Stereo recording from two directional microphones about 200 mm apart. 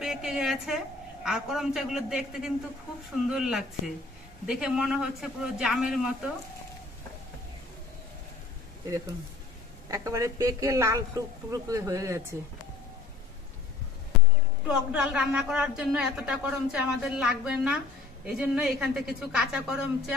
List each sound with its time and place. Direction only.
0.0 s a woman's voice: centre (ahead or behind)
8.8 s a woman's voice: 15° right (ahead or behind)
14.7 s a woman's voice: 5° right (ahead or behind)